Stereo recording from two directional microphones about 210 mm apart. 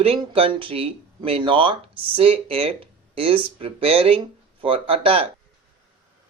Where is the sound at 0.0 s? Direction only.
25° right (ahead or behind).